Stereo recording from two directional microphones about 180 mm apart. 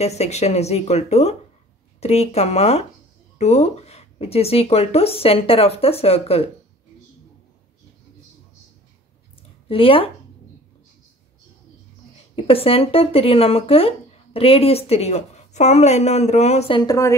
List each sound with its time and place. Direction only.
0.0 s speech: 35° left (ahead or behind)
9.7 s speech: 30° left (ahead or behind)
12.4 s speech: 30° left (ahead or behind)